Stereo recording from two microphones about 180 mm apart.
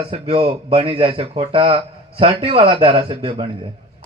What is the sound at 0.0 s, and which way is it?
A man's voice, 30° right (ahead or behind).